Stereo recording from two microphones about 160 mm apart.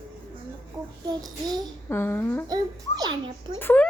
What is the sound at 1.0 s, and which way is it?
Child singing, 25° right (ahead or behind).